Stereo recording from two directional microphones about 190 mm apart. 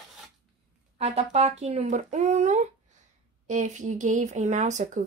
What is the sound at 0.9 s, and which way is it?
Speech, 35° right (ahead or behind).